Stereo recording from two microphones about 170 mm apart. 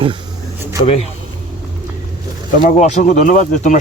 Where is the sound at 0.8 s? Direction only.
35° left (ahead or behind).